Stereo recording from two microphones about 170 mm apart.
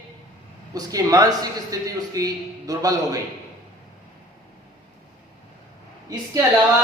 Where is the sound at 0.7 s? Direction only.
20° right (ahead or behind).